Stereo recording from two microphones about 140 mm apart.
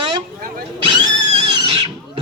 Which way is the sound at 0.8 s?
35° right (ahead or behind).